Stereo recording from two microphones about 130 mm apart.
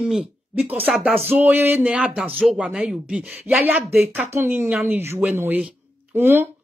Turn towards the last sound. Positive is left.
turn(degrees=-15)  # may be behind; listen again after turning